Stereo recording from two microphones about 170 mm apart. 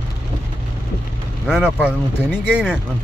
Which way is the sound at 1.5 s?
5° right (ahead or behind).